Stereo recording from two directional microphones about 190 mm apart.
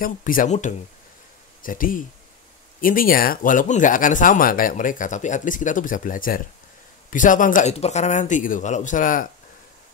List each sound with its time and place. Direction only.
0.0 s speech: 45° left (ahead or behind)